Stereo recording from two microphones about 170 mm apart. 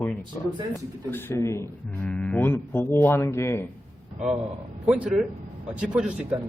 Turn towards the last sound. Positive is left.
turn(degrees=-5)  # may be behind; listen again after turning